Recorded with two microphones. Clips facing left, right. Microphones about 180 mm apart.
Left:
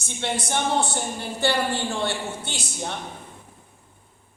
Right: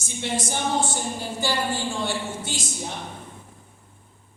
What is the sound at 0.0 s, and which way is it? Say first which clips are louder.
A woman's voice: even; 65° left (ahead or behind).